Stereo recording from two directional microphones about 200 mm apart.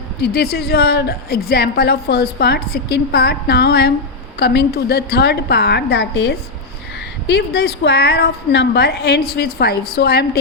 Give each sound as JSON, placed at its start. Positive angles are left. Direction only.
{"t": 0.2, "sound": "a woman's voice", "side_deg": 50}